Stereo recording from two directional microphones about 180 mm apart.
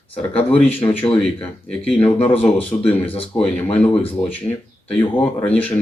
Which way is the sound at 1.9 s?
30° left (ahead or behind).